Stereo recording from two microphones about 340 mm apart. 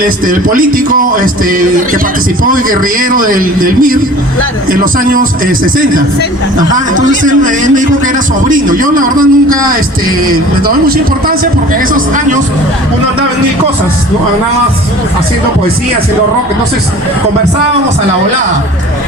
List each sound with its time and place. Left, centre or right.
0.0 s a man's voice: right
7.4 s a man's voice: right